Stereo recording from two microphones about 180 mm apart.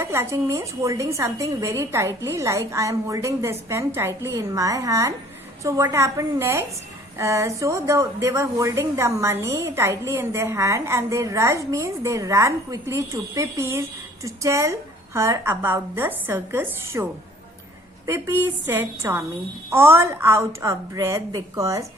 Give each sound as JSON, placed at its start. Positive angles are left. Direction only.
{"t": 0.0, "sound": "a woman's voice", "side_deg": -15}